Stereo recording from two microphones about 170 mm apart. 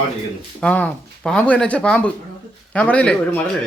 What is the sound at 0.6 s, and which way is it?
Speech, 10° left (ahead or behind).